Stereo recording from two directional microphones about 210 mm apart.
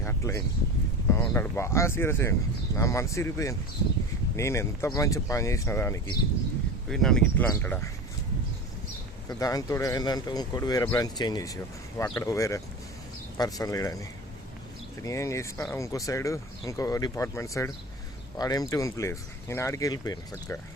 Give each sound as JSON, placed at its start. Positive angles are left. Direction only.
{"t": 0.0, "sound": "a sound", "side_deg": 10}
{"t": 1.1, "sound": "speech", "side_deg": 10}
{"t": 6.8, "sound": "speech", "side_deg": 0}
{"t": 9.4, "sound": "speech", "side_deg": 15}